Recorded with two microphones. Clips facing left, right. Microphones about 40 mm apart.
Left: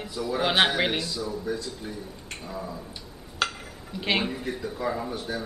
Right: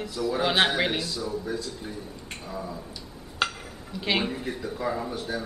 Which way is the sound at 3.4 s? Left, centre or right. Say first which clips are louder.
Even; centre.